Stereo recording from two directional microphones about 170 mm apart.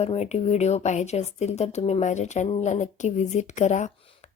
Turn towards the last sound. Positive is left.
turn(degrees=45)  # may be behind; listen again after turning